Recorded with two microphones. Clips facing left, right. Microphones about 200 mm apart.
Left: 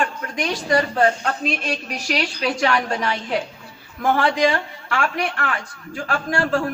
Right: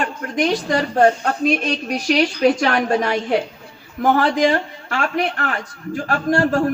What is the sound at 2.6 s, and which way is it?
A man's voice, 50° right (ahead or behind).